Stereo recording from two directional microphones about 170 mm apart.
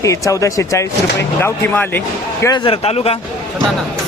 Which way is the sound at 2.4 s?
30° left (ahead or behind).